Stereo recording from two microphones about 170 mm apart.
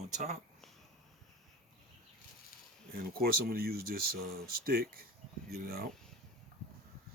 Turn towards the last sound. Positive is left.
turn(degrees=-60)  # may be behind; listen again after turning